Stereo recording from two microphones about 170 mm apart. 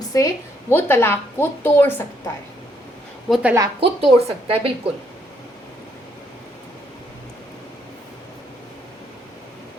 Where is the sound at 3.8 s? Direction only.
35° right (ahead or behind).